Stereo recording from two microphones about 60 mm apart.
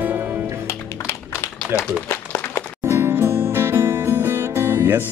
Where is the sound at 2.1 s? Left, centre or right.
Left.